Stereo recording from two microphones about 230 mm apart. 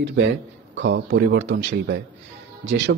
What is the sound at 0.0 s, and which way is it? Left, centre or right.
A man's voice, right.